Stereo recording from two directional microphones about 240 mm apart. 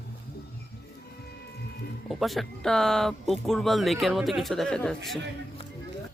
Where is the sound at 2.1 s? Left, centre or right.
Centre.